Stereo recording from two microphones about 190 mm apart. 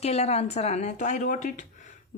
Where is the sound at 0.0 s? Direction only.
35° left (ahead or behind).